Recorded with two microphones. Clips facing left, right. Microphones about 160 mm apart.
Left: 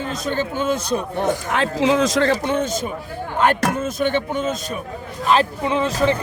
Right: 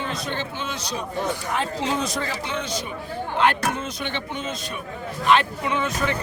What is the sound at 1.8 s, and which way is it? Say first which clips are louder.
Speech: left 9 dB; 90° left.